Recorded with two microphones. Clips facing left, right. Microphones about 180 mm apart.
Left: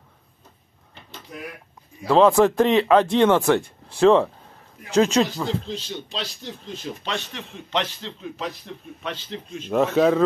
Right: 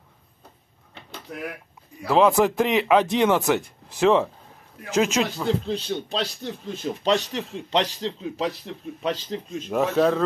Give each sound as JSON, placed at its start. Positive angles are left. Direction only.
{"t": 2.1, "sound": "a man's voice", "side_deg": -10}
{"t": 5.7, "sound": "speech", "side_deg": -55}
{"t": 7.1, "sound": "a man's voice", "side_deg": -35}
{"t": 9.7, "sound": "speech", "side_deg": -5}